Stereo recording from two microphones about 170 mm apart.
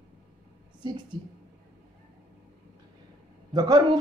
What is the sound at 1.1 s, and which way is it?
Speech, 25° right (ahead or behind).